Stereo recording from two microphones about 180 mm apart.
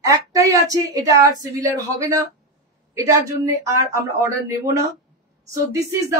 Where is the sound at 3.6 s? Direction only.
15° right (ahead or behind).